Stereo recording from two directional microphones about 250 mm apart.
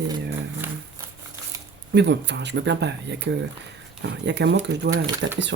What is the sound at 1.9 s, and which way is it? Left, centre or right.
Speech, right.